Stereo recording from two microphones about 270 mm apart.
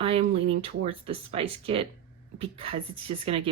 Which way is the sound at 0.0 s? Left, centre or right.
Right.